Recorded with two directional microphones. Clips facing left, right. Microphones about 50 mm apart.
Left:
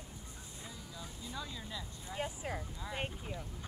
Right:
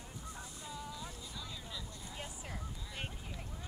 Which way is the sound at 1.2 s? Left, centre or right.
Left.